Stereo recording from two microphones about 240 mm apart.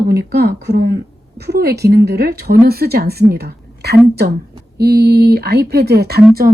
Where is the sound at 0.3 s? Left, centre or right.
Right.